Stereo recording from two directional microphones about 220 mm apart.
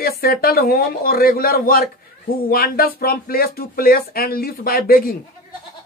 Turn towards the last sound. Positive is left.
turn(degrees=40)  # may be behind; listen again after turning